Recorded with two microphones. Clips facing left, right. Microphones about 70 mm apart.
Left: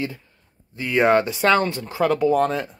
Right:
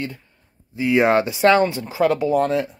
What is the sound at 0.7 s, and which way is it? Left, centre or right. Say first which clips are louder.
Speech: right 1 dB; centre.